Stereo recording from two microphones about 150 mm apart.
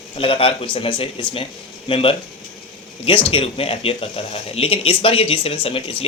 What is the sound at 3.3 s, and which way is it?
Speech, 40° left (ahead or behind).